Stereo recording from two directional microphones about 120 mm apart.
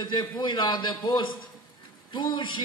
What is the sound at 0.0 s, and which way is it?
Speech, 40° left (ahead or behind).